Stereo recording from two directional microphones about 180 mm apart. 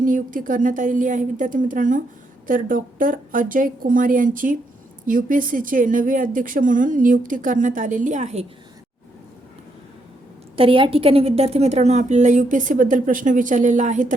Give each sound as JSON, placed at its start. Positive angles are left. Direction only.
{"t": 0.0, "sound": "a woman's voice", "side_deg": -50}
{"t": 10.5, "sound": "a woman's voice", "side_deg": -30}